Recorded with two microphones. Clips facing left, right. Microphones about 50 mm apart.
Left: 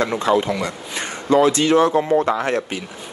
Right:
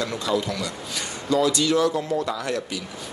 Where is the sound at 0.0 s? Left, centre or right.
Left.